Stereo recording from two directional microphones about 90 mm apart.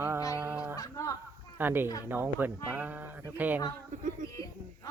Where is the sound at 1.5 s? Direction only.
25° right (ahead or behind).